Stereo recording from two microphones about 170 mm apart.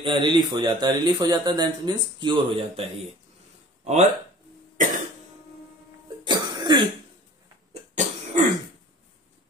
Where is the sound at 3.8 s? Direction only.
40° right (ahead or behind).